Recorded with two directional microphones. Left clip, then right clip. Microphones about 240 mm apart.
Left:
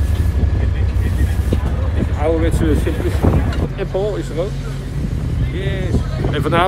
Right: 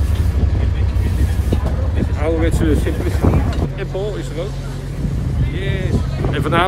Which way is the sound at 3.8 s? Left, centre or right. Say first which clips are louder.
Left 6 dB; centre.